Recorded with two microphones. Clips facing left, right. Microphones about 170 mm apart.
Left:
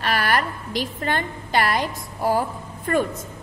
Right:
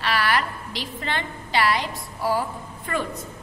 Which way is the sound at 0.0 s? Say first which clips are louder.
Left 1 dB; 45° left (ahead or behind).